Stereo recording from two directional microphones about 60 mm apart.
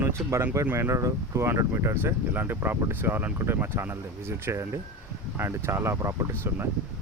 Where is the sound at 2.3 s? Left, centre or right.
Right.